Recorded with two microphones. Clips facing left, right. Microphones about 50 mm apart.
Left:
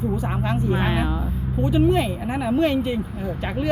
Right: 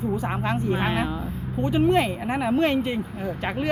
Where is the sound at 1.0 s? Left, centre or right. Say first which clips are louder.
Left 2 dB; left.